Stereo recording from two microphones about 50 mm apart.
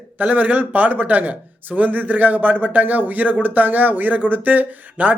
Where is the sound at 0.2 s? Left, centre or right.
Right.